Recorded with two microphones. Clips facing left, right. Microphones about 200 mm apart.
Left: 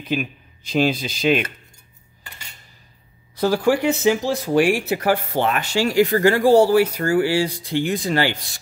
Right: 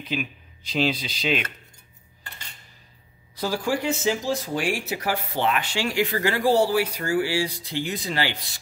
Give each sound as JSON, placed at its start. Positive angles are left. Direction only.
{"t": 0.1, "sound": "speech", "side_deg": 50}
{"t": 3.3, "sound": "speech", "side_deg": 60}